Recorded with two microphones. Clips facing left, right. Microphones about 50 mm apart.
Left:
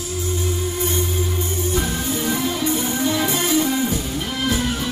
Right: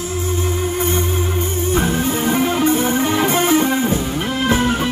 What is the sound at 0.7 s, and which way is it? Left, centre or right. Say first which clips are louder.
Music: right 4 dB; right.